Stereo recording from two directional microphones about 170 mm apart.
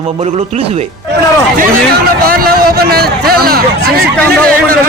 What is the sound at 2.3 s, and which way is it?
A man's voice, 60° right (ahead or behind).